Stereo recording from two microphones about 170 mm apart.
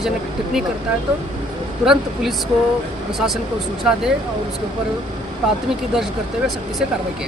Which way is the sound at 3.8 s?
5° right (ahead or behind).